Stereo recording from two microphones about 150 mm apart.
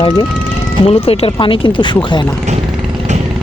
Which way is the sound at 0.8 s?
40° left (ahead or behind).